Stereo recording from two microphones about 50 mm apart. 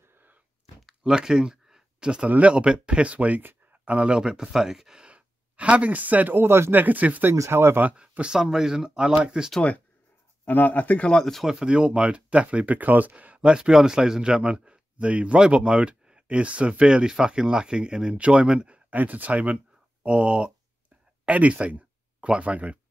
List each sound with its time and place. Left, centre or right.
0.8 s a sound: centre
2.2 s speech: right
2.5 s speech: centre
5.0 s speech: right
6.3 s speech: right
6.7 s speech: right
7.3 s speech: right
8.3 s speech: centre
10.4 s speech: left
11.1 s speech: centre
11.5 s speech: centre
18.9 s speech: right